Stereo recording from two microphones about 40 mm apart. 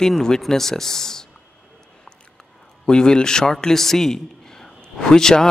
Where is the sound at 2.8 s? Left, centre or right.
Centre.